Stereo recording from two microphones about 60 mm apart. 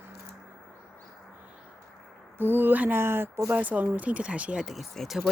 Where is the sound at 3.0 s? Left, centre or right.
Right.